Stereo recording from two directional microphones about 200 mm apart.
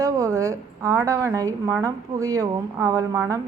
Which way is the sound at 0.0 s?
15° right (ahead or behind).